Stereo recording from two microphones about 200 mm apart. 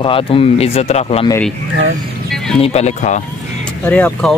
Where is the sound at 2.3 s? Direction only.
Centre (ahead or behind).